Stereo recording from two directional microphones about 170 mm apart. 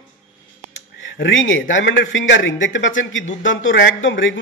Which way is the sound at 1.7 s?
90° left.